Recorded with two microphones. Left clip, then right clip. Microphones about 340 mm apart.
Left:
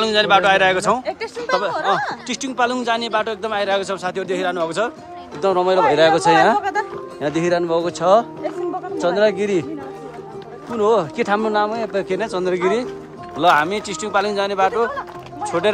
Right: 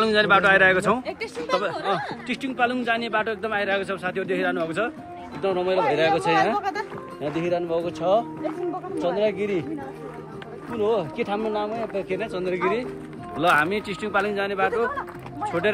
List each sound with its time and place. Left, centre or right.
0.0 s a man's voice: centre; by 6.3 s left
6.6 s music: left
7.3 s speech: left
9.4 s speech: left
10.8 s speech: left
13.4 s speech: centre